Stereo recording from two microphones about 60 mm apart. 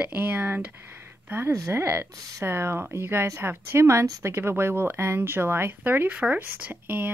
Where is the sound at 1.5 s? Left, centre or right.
Right.